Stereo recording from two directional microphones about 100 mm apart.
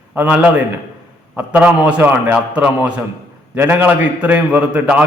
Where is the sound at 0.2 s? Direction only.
15° right (ahead or behind).